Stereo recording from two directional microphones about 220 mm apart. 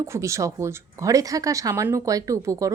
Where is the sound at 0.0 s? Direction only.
15° right (ahead or behind).